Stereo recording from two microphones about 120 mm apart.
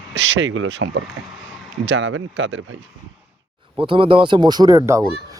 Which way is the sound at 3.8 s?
45° right (ahead or behind).